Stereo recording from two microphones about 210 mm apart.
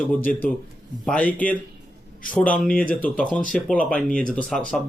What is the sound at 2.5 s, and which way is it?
Speech, 5° left (ahead or behind).